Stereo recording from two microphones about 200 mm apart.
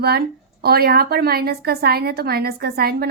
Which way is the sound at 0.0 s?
50° right (ahead or behind).